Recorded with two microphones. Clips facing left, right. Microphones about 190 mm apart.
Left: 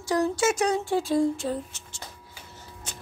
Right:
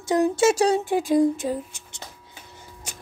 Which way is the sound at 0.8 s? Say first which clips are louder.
Right 4 dB; 15° right (ahead or behind).